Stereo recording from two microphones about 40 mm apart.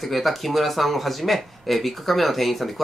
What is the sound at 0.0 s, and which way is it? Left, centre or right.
Speech, centre.